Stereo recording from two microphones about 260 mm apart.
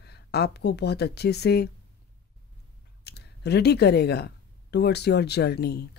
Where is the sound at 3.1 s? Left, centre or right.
Left.